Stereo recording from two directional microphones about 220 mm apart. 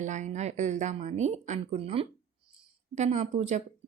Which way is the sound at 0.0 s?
35° right (ahead or behind).